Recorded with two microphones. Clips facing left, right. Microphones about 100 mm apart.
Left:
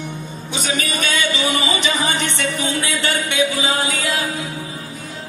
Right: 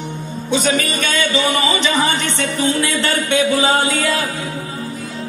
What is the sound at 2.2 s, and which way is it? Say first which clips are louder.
Music: right 3 dB; 40° right (ahead or behind).